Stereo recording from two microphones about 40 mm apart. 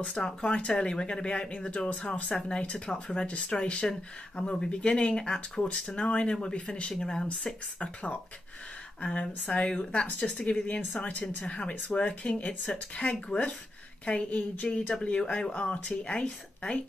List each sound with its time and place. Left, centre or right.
0.1 s speech: centre
7.8 s speech: left
14.0 s speech: left
15.1 s speech: left